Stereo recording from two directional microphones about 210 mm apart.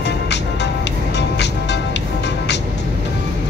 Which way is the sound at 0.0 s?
55° left (ahead or behind).